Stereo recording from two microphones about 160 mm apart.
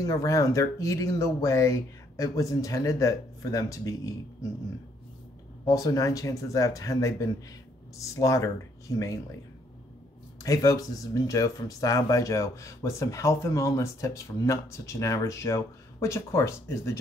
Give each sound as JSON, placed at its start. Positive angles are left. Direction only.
{"t": 0.0, "sound": "speech", "side_deg": 20}
{"t": 5.7, "sound": "speech", "side_deg": 20}
{"t": 10.4, "sound": "speech", "side_deg": 20}